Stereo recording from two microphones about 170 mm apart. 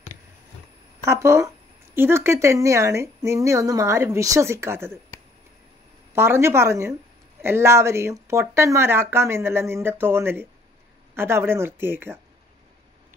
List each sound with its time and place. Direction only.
1.0 s speech: 15° right (ahead or behind)
6.1 s speech: 15° right (ahead or behind)